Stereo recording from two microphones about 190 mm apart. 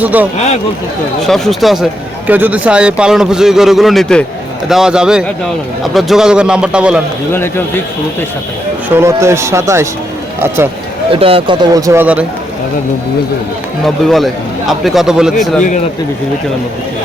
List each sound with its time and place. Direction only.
0.0 s speech: 10° right (ahead or behind)
1.3 s speech: centre (ahead or behind)
7.3 s speech: 10° left (ahead or behind)
9.0 s speech: 15° right (ahead or behind)
11.1 s speech: 30° right (ahead or behind); by 12.2 s 10° right (ahead or behind)
13.8 s speech: centre (ahead or behind)